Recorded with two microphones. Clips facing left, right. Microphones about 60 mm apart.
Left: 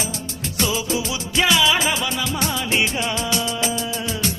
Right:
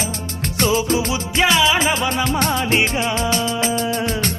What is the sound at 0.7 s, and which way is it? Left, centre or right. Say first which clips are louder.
Music: right 7 dB; right.